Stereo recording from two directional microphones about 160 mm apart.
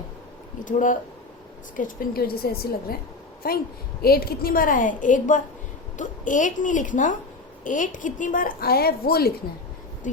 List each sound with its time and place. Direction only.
0.6 s a woman's voice: 55° left (ahead or behind); by 9.3 s 75° left (ahead or behind)